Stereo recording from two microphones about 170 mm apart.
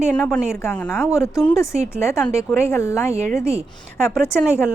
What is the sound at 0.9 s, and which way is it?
Speech, 15° left (ahead or behind).